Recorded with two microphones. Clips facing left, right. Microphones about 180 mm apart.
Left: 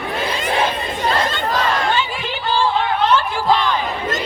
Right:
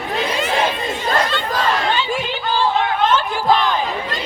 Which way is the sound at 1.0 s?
45° left (ahead or behind).